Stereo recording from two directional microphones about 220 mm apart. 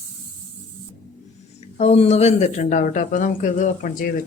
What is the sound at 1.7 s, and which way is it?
Speech, 30° left (ahead or behind).